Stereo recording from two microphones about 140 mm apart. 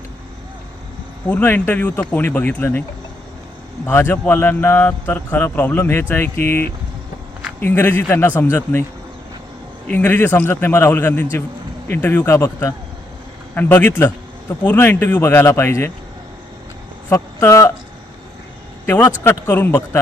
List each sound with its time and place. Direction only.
1.3 s a man's voice: 10° left (ahead or behind)
3.8 s a man's voice: 15° left (ahead or behind)
9.8 s a man's voice: 10° left (ahead or behind)
17.1 s speech: 20° left (ahead or behind)
19.2 s a man's voice: 15° left (ahead or behind)